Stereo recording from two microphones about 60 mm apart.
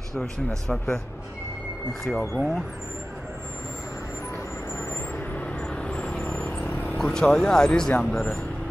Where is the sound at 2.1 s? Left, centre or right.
Centre.